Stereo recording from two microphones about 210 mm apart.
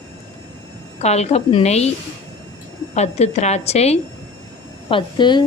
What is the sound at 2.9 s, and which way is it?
A woman's voice, 30° left (ahead or behind).